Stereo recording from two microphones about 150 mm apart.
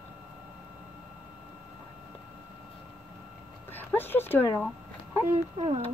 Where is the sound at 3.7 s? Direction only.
15° left (ahead or behind).